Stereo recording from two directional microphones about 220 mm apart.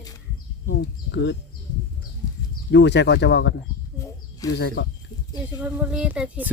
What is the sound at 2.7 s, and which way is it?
Speech, 50° left (ahead or behind).